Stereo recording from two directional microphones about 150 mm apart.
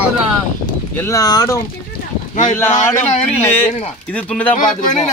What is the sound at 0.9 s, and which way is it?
Speech, 20° left (ahead or behind).